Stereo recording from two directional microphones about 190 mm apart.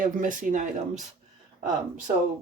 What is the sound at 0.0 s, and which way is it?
Speech, 45° right (ahead or behind).